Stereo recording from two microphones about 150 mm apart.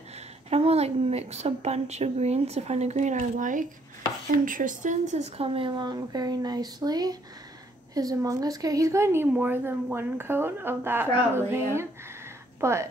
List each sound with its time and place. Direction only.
0.5 s a woman's voice: 45° right (ahead or behind); by 12.8 s 20° right (ahead or behind)